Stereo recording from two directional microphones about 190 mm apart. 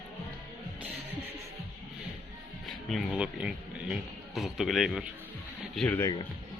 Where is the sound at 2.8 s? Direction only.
5° right (ahead or behind).